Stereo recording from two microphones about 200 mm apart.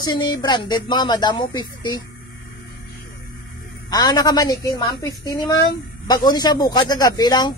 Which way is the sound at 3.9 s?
20° left (ahead or behind).